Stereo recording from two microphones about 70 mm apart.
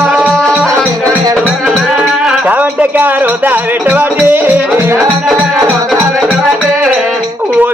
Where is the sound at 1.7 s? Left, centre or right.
Centre.